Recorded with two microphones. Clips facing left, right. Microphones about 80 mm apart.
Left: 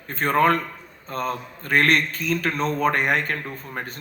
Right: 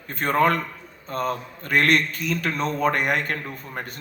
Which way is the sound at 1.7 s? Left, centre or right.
Left.